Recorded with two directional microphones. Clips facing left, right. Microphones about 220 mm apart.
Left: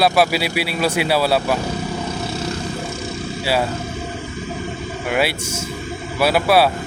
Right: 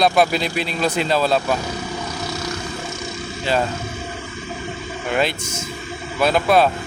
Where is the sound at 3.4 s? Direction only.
10° left (ahead or behind).